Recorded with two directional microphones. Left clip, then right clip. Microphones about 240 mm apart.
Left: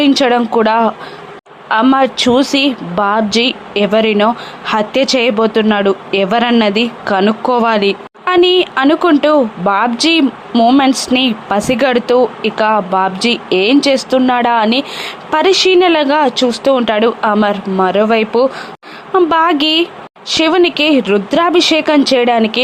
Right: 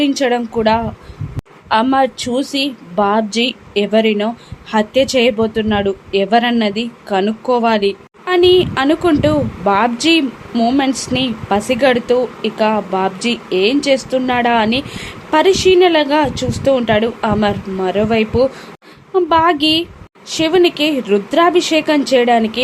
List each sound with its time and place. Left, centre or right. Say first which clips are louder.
0.0 s a woman's voice: left 4 dB; centre